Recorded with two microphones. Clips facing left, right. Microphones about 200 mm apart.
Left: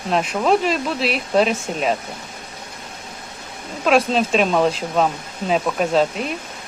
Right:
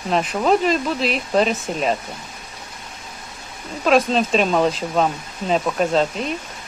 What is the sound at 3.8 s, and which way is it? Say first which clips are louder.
Speech: even; centre (ahead or behind).